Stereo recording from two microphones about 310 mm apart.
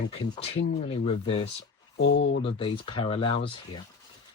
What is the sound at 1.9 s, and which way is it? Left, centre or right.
Speech, left.